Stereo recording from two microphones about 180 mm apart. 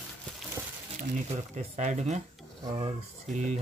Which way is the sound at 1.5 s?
40° right (ahead or behind).